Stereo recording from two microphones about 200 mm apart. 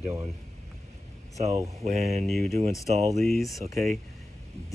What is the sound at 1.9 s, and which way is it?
Speech, 30° right (ahead or behind).